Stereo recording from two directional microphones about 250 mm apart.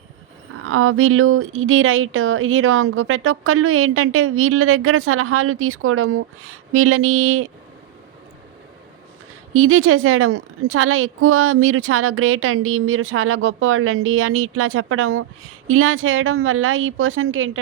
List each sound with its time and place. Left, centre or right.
0.6 s a woman's voice: right
9.5 s a woman's voice: right